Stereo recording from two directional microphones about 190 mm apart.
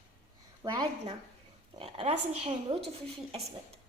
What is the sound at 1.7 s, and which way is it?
A woman's voice, 30° right (ahead or behind).